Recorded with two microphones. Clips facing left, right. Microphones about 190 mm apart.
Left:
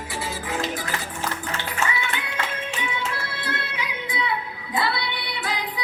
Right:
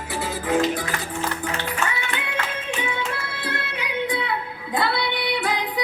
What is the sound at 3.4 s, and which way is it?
Music, 60° right (ahead or behind).